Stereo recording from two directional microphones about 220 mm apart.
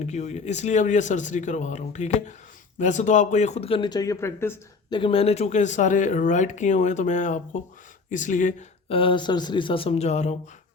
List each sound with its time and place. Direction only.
0.1 s speech: 30° left (ahead or behind); by 4.5 s 10° left (ahead or behind)
4.9 s speech: 25° left (ahead or behind)